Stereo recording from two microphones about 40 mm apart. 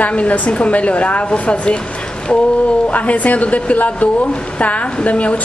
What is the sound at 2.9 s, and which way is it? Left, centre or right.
A woman's voice, left.